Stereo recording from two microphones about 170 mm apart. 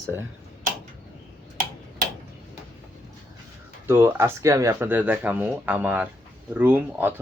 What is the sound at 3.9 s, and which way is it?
Speech, 15° right (ahead or behind).